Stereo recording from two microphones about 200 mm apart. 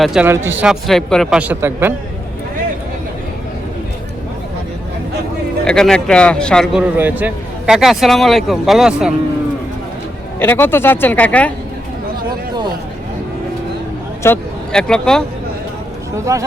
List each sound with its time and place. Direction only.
0.0 s a man's voice: 5° right (ahead or behind)
5.6 s a man's voice: 5° left (ahead or behind)
6.9 s a man's voice: 10° right (ahead or behind)
10.4 s speech: 10° left (ahead or behind)
14.2 s speech: 10° left (ahead or behind)
16.1 s speech: 15° right (ahead or behind)